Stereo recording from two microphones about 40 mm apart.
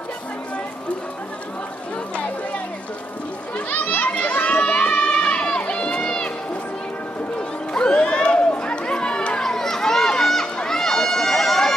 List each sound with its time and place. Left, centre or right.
3.5 s a sound: left
7.7 s crowd: left
9.4 s run: centre